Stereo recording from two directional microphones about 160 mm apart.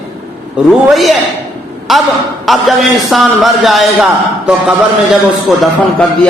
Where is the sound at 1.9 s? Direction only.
Centre (ahead or behind).